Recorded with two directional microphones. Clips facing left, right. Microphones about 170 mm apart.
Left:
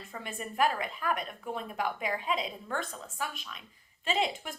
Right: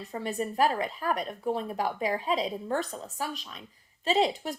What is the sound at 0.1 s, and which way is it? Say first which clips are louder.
A woman's voice: right 9 dB; 35° right (ahead or behind).